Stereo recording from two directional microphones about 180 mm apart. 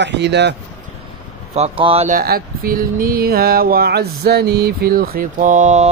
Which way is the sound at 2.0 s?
55° right (ahead or behind).